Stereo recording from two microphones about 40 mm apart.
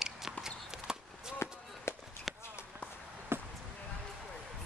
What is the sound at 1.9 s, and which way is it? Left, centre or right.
Chop, left.